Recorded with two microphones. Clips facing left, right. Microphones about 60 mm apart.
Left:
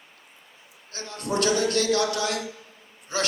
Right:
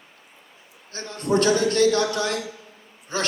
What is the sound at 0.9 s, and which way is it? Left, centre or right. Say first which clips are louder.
Speech: right 5 dB; right.